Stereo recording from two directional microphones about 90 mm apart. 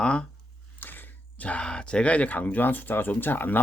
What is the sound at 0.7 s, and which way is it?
Speech, 20° left (ahead or behind).